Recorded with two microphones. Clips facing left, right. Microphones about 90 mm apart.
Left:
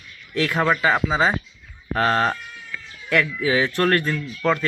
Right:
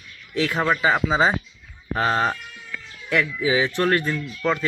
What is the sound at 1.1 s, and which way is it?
Speech, 20° right (ahead or behind).